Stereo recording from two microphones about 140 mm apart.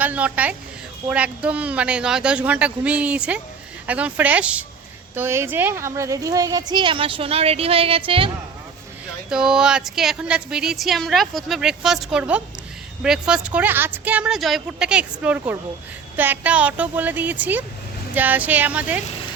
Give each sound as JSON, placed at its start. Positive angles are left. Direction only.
{"t": 0.0, "sound": "a woman's voice", "side_deg": -10}
{"t": 9.3, "sound": "a woman's voice", "side_deg": -5}